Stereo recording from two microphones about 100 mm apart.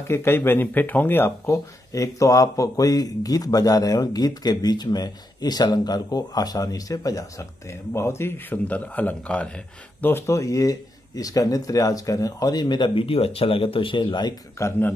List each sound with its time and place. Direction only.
0.1 s a man's voice: 25° left (ahead or behind)
10.0 s speech: 25° left (ahead or behind); by 14.3 s 50° left (ahead or behind)
14.6 s speech: 20° left (ahead or behind)